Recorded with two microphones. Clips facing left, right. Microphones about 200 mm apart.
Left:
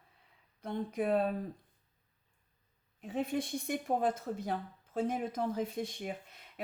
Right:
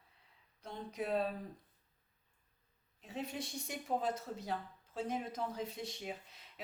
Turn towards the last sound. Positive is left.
turn(degrees=55)  # may be behind; listen again after turning